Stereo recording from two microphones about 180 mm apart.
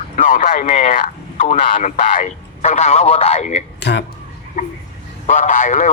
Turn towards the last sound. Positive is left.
turn(degrees=45)  # may be behind; listen again after turning